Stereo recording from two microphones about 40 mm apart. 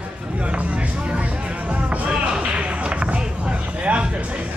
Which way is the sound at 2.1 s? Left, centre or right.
Right.